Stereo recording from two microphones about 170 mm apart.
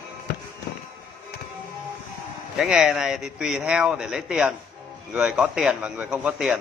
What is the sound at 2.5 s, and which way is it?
Speech, 5° right (ahead or behind).